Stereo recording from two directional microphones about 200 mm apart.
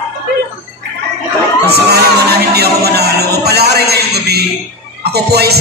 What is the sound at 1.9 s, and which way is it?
A man's voice, 55° right (ahead or behind).